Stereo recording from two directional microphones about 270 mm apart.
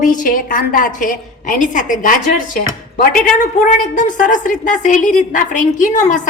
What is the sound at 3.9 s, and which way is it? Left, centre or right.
A woman's voice, left.